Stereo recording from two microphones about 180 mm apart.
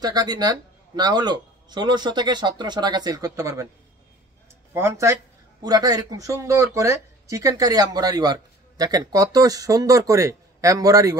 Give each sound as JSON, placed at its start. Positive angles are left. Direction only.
{"t": 0.0, "sound": "speech", "side_deg": -20}
{"t": 4.7, "sound": "speech", "side_deg": -15}